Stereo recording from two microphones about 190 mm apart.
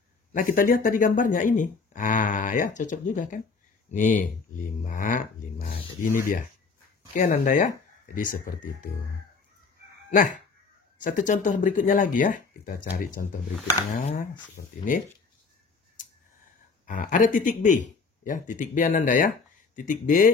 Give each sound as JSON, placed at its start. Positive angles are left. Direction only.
{"t": 0.3, "sound": "speech", "side_deg": 45}
{"t": 11.0, "sound": "speech", "side_deg": 45}
{"t": 16.8, "sound": "speech", "side_deg": 45}